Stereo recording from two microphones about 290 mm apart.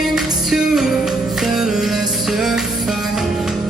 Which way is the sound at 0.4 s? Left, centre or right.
Centre.